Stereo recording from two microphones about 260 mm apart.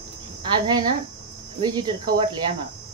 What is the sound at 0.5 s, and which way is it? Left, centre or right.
Speech, centre.